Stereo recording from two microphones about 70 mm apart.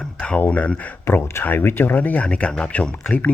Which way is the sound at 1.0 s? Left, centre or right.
Left.